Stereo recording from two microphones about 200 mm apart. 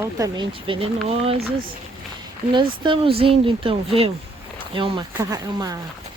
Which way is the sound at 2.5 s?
25° right (ahead or behind).